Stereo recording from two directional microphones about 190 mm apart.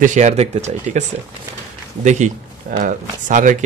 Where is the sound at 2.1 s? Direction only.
40° right (ahead or behind).